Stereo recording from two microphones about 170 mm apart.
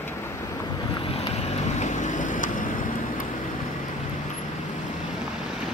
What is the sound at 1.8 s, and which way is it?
Vehicle, 45° left (ahead or behind).